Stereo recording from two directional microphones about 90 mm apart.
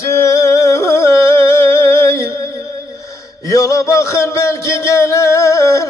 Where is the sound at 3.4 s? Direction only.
35° left (ahead or behind).